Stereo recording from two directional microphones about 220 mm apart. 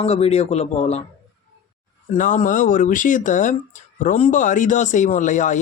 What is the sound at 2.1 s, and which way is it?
Speech, 35° left (ahead or behind).